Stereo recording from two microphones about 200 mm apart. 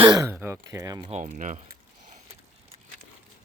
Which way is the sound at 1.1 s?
35° right (ahead or behind).